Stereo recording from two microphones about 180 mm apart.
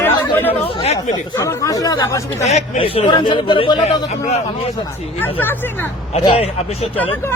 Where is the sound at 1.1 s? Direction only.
15° left (ahead or behind).